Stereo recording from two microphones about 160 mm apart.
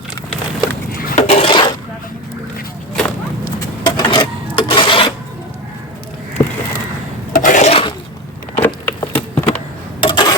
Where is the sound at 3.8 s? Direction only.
25° left (ahead or behind).